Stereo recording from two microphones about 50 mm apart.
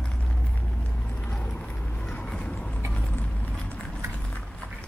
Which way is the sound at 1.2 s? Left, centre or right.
Left.